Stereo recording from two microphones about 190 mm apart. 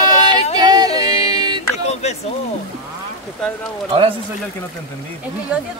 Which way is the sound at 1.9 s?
35° left (ahead or behind).